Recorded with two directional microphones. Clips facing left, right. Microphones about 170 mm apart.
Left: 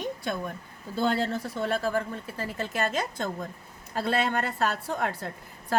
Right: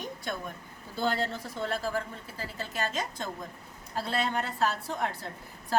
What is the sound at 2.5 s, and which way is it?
A woman's voice, 60° left (ahead or behind).